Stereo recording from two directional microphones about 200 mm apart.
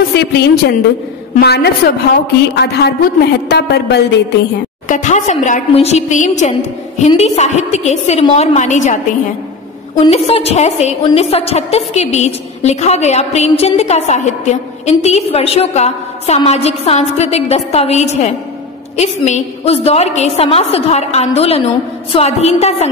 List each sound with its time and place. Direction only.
0.3 s a woman's voice: 55° left (ahead or behind)
4.8 s a woman's voice: 40° left (ahead or behind)